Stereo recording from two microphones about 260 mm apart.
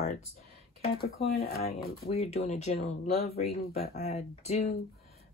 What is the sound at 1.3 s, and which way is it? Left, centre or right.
Speech, left.